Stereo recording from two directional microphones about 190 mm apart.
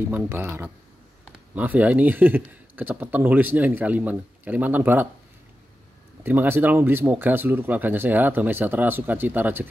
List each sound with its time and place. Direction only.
0.0 s a man's voice: 10° right (ahead or behind)
6.2 s a man's voice: 10° right (ahead or behind)